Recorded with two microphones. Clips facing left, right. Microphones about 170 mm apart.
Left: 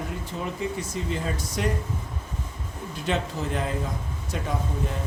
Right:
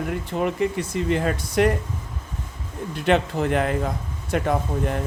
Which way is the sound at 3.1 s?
65° right (ahead or behind).